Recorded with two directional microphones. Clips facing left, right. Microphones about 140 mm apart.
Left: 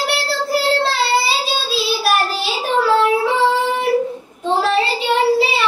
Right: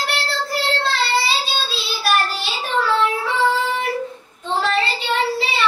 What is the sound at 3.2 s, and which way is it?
Female singing, 25° left (ahead or behind).